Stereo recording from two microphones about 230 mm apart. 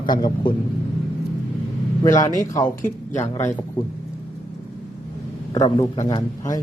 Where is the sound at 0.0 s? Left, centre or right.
Centre.